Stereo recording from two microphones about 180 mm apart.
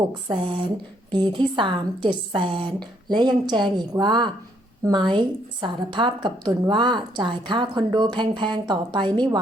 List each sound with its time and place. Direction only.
0.1 s a woman's voice: 30° right (ahead or behind)